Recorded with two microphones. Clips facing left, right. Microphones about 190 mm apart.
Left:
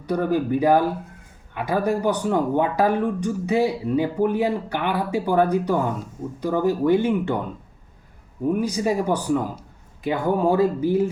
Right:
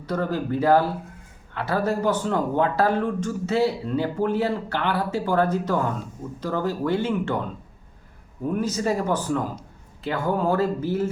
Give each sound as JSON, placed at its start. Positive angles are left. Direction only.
{"t": 0.0, "sound": "speech", "side_deg": 15}
{"t": 8.4, "sound": "speech", "side_deg": 10}